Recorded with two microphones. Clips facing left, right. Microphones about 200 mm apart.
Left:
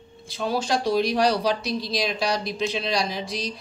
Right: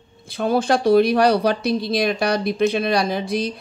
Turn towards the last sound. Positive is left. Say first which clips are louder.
# right 8 dB
turn(degrees=-55)  # may be behind; listen again after turning